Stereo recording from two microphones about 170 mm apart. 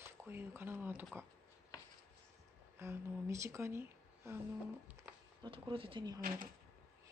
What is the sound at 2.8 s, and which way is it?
Speech, 15° right (ahead or behind).